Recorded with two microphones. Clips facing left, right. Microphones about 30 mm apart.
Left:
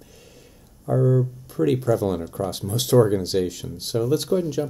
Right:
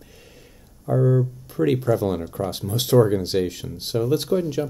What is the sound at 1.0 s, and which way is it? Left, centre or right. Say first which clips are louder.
Speech: even; right.